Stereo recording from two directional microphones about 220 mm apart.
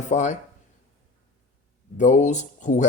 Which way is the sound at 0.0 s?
35° left (ahead or behind).